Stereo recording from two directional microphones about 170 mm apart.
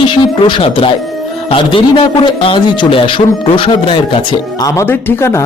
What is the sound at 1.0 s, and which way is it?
Music, centre (ahead or behind).